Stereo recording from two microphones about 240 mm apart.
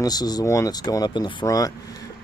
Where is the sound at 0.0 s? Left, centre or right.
Centre.